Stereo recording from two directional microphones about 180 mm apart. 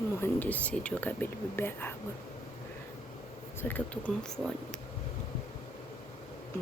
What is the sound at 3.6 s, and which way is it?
Speech, 10° left (ahead or behind).